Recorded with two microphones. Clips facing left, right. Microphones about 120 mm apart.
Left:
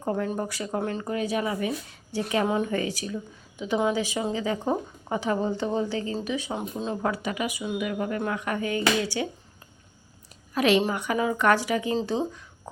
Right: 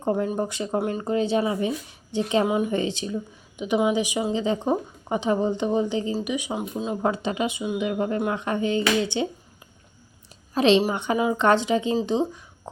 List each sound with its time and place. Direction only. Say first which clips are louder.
0.0 s speech: right 4 dB; 20° right (ahead or behind)
1.0 s speech: right 5 dB; 25° right (ahead or behind); by 7.0 s 5° right (ahead or behind)
7.0 s speech: right 5 dB; 25° right (ahead or behind)
10.5 s speech: right 3 dB; 25° right (ahead or behind)